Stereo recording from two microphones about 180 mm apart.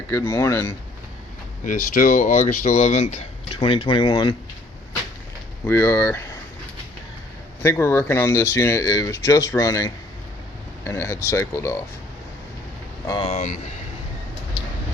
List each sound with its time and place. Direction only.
0.1 s speech: 20° left (ahead or behind)
1.6 s speech: 45° left (ahead or behind); by 4.4 s 25° left (ahead or behind)
5.6 s speech: 15° left (ahead or behind)
7.6 s speech: 15° left (ahead or behind)
13.1 s speech: 25° left (ahead or behind)
13.3 s speech: 40° left (ahead or behind)